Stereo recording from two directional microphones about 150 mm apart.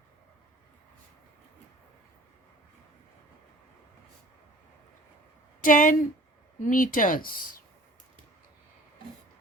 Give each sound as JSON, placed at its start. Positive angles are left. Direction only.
{"t": 5.6, "sound": "speech", "side_deg": 65}